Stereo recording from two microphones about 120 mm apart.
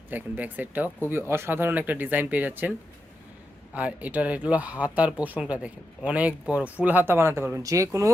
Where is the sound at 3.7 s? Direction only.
15° right (ahead or behind).